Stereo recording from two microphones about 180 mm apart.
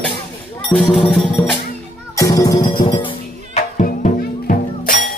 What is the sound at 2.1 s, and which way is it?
Music, 20° left (ahead or behind).